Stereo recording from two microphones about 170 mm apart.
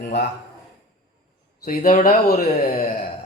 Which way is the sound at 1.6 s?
50° left (ahead or behind).